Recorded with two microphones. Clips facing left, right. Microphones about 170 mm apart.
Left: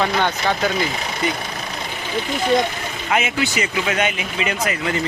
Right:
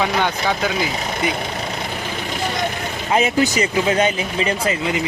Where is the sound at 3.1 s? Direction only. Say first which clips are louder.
Right 4 dB; 35° right (ahead or behind).